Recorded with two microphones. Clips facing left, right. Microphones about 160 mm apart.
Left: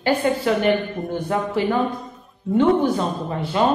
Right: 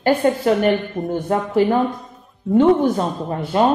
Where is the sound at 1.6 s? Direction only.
45° right (ahead or behind).